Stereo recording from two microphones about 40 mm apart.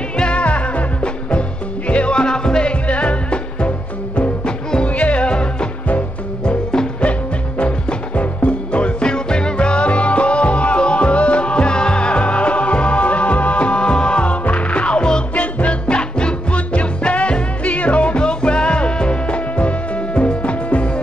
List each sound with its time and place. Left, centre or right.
0.2 s music: left
2.9 s music: left
4.8 s music: left; by 6.9 s centre
7.0 s music: left
15.3 s music: left